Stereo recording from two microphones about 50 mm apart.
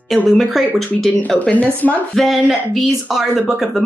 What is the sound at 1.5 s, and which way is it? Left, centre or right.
Speech, left.